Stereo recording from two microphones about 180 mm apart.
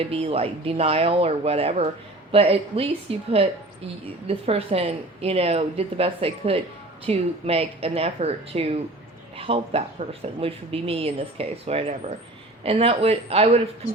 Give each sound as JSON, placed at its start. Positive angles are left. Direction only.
{"t": 0.0, "sound": "a woman's voice", "side_deg": -35}